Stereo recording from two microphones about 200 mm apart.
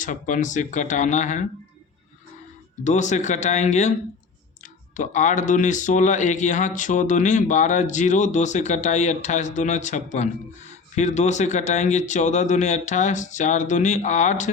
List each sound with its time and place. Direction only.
0.0 s speech: 40° left (ahead or behind)
2.8 s speech: 35° left (ahead or behind)